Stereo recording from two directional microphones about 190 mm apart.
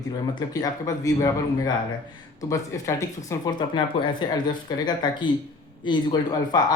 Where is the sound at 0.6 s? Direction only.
20° left (ahead or behind).